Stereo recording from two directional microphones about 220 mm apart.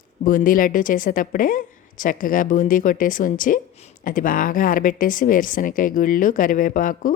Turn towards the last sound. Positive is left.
turn(degrees=40)  # may be behind; listen again after turning